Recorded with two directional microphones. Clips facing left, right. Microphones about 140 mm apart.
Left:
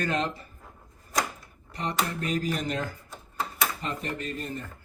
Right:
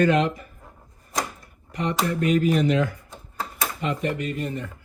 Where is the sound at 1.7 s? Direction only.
35° left (ahead or behind).